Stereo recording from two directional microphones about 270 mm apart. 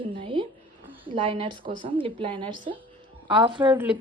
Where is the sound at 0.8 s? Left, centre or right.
Centre.